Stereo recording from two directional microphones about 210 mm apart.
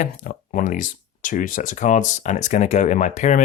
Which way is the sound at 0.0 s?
40° left (ahead or behind).